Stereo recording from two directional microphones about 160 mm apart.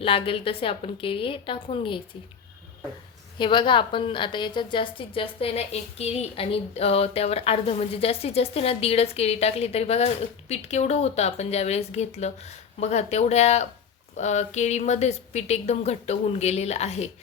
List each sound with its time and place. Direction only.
0.0 s a woman's voice: 35° left (ahead or behind)
3.3 s a woman's voice: 30° left (ahead or behind)